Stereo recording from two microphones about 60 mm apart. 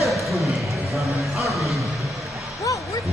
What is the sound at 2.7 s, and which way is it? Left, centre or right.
Basketball bounce, left.